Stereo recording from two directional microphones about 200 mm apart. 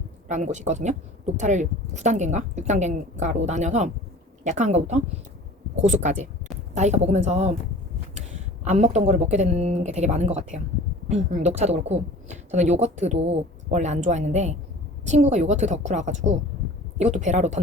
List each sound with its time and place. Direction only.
0.3 s speech: 35° right (ahead or behind)
8.6 s speech: 35° right (ahead or behind)